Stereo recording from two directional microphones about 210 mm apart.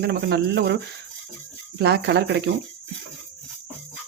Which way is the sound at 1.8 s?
55° right (ahead or behind).